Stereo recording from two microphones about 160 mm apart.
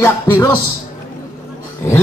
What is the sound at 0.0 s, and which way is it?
Speech, 15° left (ahead or behind).